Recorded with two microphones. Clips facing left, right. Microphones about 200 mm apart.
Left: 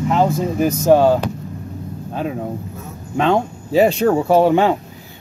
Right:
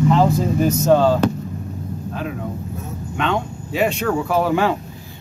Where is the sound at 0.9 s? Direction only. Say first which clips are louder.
Left 3 dB; 15° left (ahead or behind).